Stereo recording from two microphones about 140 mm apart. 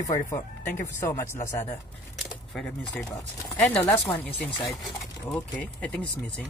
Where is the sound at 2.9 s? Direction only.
20° left (ahead or behind).